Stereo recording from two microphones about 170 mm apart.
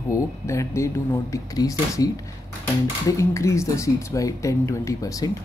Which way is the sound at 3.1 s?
15° left (ahead or behind).